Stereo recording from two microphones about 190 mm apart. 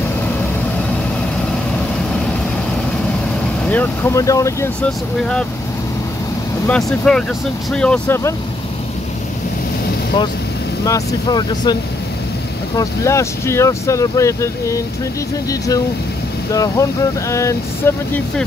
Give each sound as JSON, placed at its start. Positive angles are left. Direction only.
{"t": 3.6, "sound": "speech", "side_deg": 10}
{"t": 6.7, "sound": "speech", "side_deg": 5}
{"t": 10.9, "sound": "speech", "side_deg": 20}
{"t": 12.7, "sound": "speech", "side_deg": 15}
{"t": 16.5, "sound": "speech", "side_deg": 20}